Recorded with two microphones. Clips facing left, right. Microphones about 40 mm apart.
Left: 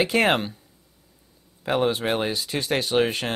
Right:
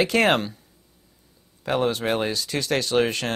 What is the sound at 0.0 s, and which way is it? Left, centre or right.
Speech, centre.